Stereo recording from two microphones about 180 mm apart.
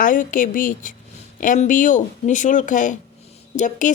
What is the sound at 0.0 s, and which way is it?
Speech, 50° left (ahead or behind).